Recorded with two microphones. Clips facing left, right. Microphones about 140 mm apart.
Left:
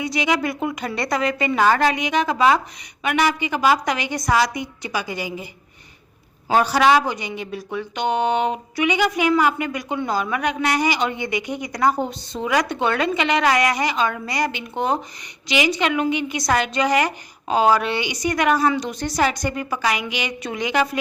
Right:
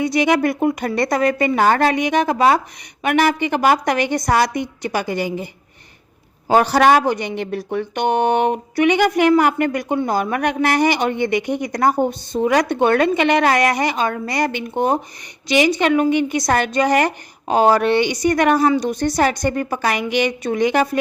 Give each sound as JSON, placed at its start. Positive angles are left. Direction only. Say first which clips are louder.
{"t": 0.0, "sound": "a woman's voice", "louder": "right 6 dB", "side_deg": -55}
{"t": 6.6, "sound": "a woman's voice", "louder": "right 2 dB", "side_deg": -55}
{"t": 7.1, "sound": "a woman's voice", "louder": "right 6 dB", "side_deg": -60}